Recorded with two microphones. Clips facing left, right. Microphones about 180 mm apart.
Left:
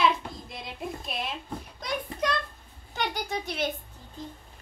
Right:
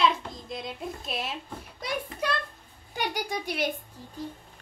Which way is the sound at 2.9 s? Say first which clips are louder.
Even; 10° right (ahead or behind).